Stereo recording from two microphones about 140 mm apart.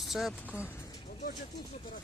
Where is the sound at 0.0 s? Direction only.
Centre (ahead or behind).